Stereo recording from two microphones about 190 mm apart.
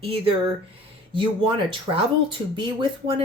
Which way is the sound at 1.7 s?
25° right (ahead or behind).